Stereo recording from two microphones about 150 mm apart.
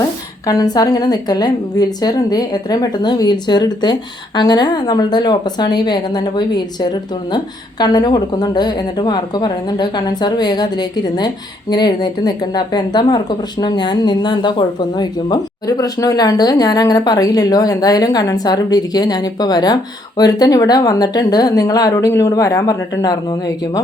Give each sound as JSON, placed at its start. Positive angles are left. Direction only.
{"t": 0.4, "sound": "a woman's voice", "side_deg": 25}